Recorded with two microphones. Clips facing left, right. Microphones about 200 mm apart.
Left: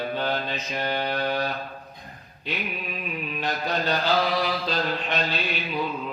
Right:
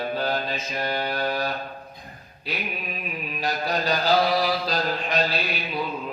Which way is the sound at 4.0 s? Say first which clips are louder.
Right 5 dB; 40° right (ahead or behind).